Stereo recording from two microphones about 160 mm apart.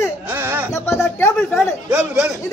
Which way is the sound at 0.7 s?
15° left (ahead or behind).